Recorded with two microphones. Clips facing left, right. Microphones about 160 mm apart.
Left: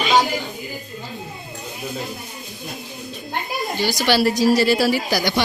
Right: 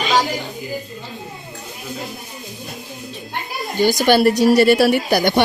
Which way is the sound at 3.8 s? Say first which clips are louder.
Right 6 dB; 50° right (ahead or behind).